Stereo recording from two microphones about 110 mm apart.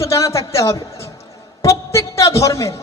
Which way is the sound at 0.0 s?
25° left (ahead or behind).